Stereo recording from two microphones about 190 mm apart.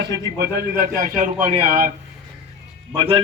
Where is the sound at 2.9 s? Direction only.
25° right (ahead or behind).